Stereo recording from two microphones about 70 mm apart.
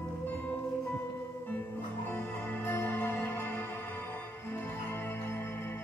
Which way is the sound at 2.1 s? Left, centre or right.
Left.